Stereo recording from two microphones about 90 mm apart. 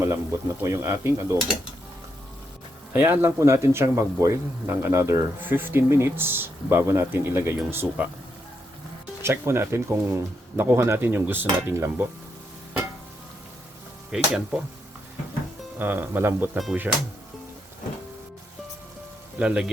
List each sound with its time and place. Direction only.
0.0 s speech: 30° right (ahead or behind)
2.9 s speech: 25° right (ahead or behind)
9.2 s speech: 25° right (ahead or behind)
14.1 s speech: 5° right (ahead or behind)
15.8 s speech: 25° right (ahead or behind)
19.4 s speech: 10° right (ahead or behind)